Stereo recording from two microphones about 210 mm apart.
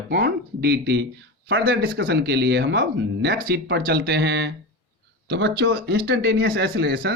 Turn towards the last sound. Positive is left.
turn(degrees=-55)  # may be behind; listen again after turning